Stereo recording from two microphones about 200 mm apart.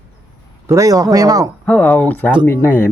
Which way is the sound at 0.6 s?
15° right (ahead or behind).